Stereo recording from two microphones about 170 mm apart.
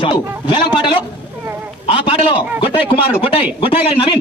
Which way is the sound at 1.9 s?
35° left (ahead or behind).